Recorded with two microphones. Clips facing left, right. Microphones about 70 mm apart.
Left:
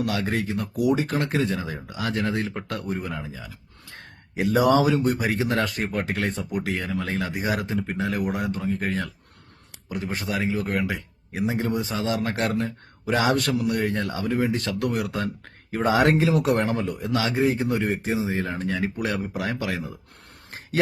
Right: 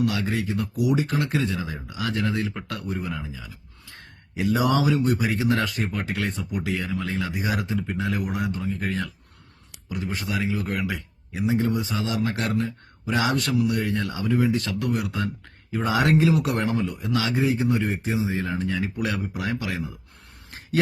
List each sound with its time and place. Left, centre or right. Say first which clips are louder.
0.1 s speech: left 1 dB; left
18.2 s speech: even; left
19.6 s speech: left 1 dB; left
20.5 s a sound: left 2 dB; left